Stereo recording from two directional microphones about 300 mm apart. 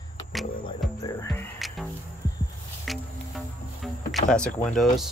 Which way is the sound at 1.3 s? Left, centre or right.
Centre.